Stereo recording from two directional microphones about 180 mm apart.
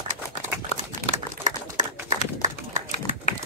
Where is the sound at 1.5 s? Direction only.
45° right (ahead or behind).